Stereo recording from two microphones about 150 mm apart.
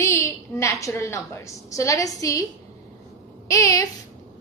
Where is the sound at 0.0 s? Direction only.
20° left (ahead or behind).